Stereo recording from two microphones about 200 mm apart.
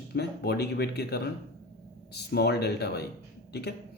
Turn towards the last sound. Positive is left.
turn(degrees=55)  # may be behind; listen again after turning